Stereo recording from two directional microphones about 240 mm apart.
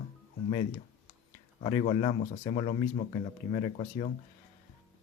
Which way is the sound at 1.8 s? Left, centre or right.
Left.